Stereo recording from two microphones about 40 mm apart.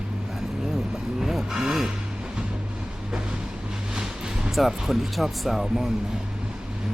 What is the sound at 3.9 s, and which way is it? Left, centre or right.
Vehicle, centre.